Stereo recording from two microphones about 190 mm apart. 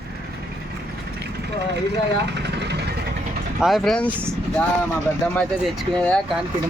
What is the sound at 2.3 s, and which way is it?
Vehicle, 60° right (ahead or behind).